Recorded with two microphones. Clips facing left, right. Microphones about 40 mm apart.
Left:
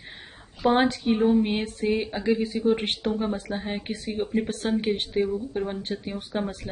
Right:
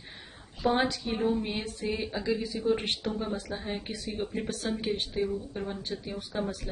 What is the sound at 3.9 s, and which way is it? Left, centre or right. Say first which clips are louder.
Speech: left 10 dB; left.